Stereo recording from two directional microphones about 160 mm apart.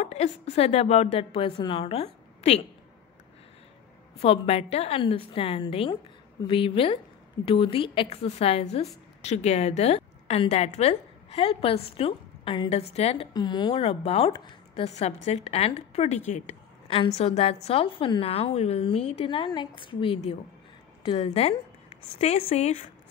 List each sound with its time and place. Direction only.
0.0 s a woman's voice: 45° left (ahead or behind)
4.2 s a woman's voice: 40° left (ahead or behind)
13.3 s a woman's voice: 25° left (ahead or behind)
13.7 s a woman's voice: 40° left (ahead or behind)
16.3 s a sound: 45° left (ahead or behind)
17.1 s a woman's voice: 40° left (ahead or behind)